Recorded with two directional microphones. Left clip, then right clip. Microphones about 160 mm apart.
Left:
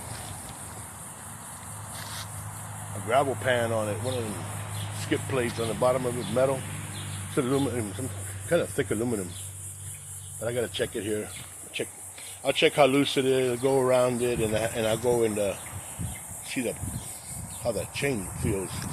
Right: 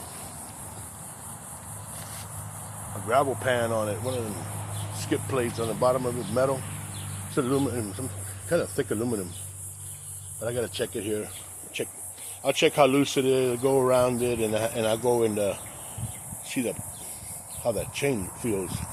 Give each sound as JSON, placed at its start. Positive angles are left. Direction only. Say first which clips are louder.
{"t": 3.1, "sound": "speech", "louder": "even", "side_deg": 0}
{"t": 10.4, "sound": "speech", "louder": "even", "side_deg": 0}
{"t": 12.4, "sound": "speech", "louder": "even", "side_deg": -10}